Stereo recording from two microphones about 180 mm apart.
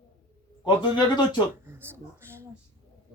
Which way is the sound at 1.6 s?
10° right (ahead or behind).